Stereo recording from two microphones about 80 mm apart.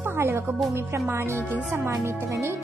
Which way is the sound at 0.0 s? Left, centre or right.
Right.